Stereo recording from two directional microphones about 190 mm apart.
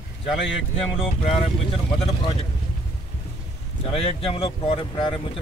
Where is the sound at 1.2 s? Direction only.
30° left (ahead or behind).